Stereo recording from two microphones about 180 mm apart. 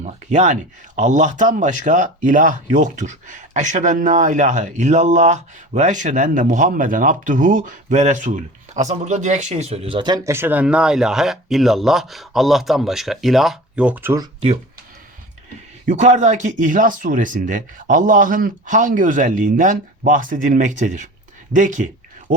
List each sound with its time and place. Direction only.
0.0 s speech: 45° right (ahead or behind); by 14.3 s 15° right (ahead or behind)
15.9 s speech: 40° right (ahead or behind)